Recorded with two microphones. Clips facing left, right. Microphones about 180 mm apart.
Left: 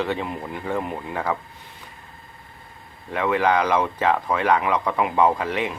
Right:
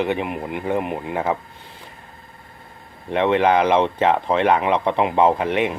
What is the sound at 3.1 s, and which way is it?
Speech, 25° right (ahead or behind).